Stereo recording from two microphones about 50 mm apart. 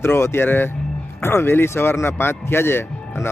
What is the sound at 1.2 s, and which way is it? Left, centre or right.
Speech, left.